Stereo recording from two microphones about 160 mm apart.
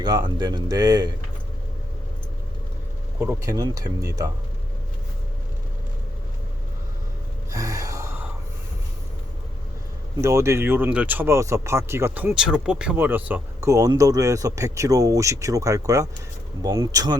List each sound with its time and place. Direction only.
0.0 s speech: 25° right (ahead or behind)
3.2 s speech: 15° right (ahead or behind)
7.5 s gasp: 20° right (ahead or behind)
10.2 s speech: 20° right (ahead or behind)